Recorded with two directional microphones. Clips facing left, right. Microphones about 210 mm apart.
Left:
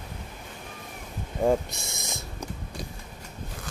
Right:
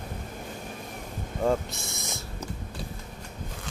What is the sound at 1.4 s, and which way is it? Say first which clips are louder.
Speech: left 2 dB; 15° left (ahead or behind).